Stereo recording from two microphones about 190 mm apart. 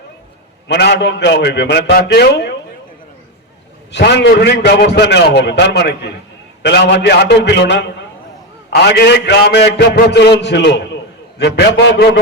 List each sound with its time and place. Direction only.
0.7 s a man's voice: 65° left (ahead or behind)
3.9 s a man's voice: 65° left (ahead or behind)